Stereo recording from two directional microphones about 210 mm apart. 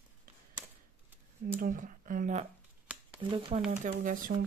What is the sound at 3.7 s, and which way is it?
Speech, 35° right (ahead or behind).